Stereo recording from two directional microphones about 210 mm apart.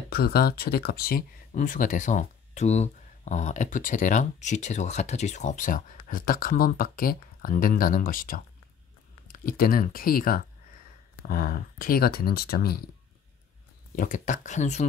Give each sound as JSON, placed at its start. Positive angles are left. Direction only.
{"t": 0.1, "sound": "speech", "side_deg": 45}
{"t": 13.9, "sound": "speech", "side_deg": 35}